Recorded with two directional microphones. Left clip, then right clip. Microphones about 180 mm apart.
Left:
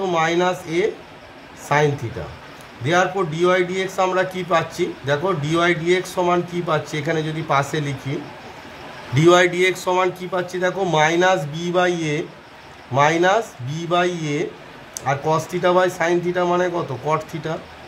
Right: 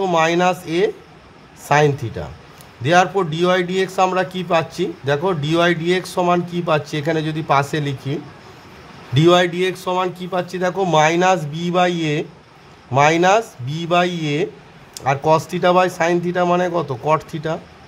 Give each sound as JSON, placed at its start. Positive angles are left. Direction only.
{"t": 0.0, "sound": "a man's voice", "side_deg": -40}
{"t": 2.8, "sound": "a man's voice", "side_deg": -40}
{"t": 9.1, "sound": "a man's voice", "side_deg": -35}